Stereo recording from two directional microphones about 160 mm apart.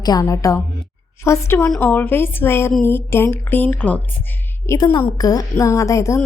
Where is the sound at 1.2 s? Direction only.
15° left (ahead or behind).